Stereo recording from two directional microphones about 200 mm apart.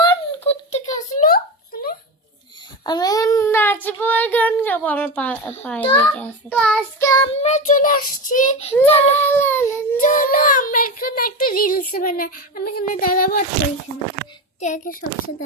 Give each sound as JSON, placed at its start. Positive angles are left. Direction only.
{"t": 0.0, "sound": "a sound", "side_deg": 25}
{"t": 0.9, "sound": "a sound", "side_deg": 40}
{"t": 2.8, "sound": "child singing", "side_deg": 20}
{"t": 3.8, "sound": "a woman's voice", "side_deg": 10}
{"t": 7.0, "sound": "a child's voice", "side_deg": 15}
{"t": 7.4, "sound": "a child's voice", "side_deg": 35}
{"t": 9.2, "sound": "a child's voice", "side_deg": 10}
{"t": 10.0, "sound": "a child's voice", "side_deg": 40}
{"t": 14.6, "sound": "a child's voice", "side_deg": 40}